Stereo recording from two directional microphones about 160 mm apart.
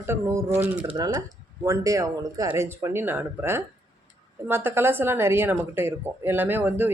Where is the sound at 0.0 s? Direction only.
15° right (ahead or behind).